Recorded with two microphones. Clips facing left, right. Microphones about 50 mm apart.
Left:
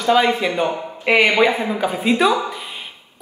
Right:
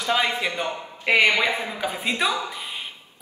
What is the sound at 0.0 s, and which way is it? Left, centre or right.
Speech, centre.